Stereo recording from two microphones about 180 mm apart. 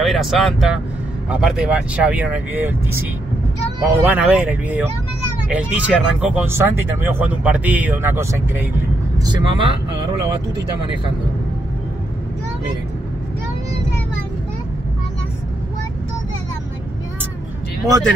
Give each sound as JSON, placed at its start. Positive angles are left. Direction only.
{"t": 0.0, "sound": "speech", "side_deg": 0}
{"t": 9.2, "sound": "speech", "side_deg": -25}